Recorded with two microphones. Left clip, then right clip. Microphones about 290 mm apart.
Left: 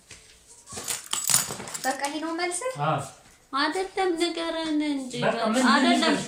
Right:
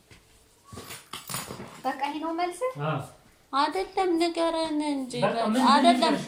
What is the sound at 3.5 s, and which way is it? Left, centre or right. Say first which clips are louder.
A woman's voice: even; centre.